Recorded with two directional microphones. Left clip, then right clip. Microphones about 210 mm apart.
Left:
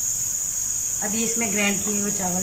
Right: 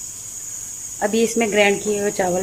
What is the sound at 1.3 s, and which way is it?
Speech, 45° right (ahead or behind).